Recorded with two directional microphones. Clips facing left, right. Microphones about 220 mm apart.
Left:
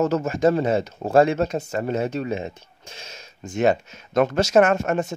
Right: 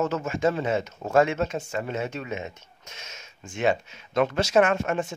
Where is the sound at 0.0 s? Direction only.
40° left (ahead or behind).